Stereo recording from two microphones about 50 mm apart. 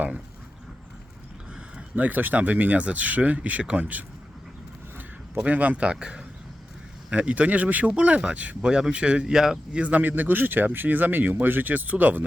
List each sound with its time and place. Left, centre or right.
2.0 s speech: right
5.5 s speech: right; by 9.8 s centre
9.8 s speech: right